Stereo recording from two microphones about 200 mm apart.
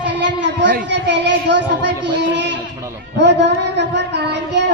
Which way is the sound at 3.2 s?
60° right (ahead or behind).